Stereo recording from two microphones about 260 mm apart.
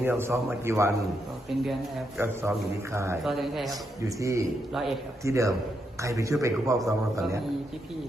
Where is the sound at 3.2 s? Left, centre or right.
Centre.